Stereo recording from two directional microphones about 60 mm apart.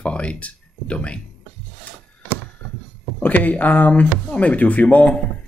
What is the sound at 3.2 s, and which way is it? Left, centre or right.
Speech, left.